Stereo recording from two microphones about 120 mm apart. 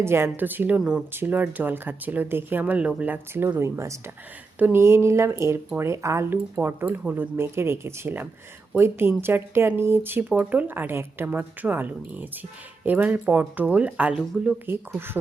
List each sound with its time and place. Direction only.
0.0 s speech: 20° right (ahead or behind)